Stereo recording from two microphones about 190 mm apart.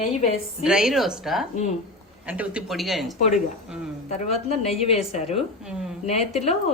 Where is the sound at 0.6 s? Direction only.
5° right (ahead or behind).